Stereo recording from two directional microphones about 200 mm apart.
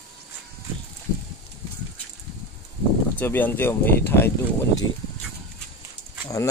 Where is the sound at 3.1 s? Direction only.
10° left (ahead or behind).